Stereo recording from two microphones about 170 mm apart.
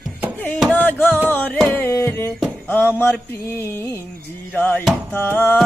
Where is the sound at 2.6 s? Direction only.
10° left (ahead or behind).